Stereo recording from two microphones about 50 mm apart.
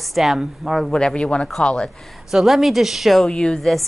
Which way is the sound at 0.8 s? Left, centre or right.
Centre.